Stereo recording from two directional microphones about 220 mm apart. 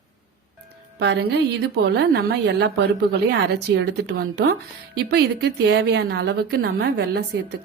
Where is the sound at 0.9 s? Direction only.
50° right (ahead or behind).